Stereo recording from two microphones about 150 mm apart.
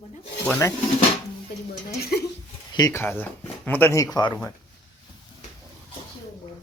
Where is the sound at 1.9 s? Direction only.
90° left.